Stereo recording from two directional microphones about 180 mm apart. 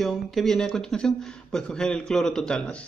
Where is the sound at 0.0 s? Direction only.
Centre (ahead or behind).